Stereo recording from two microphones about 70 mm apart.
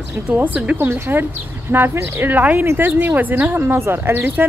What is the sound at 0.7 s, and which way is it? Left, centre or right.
Speech, right.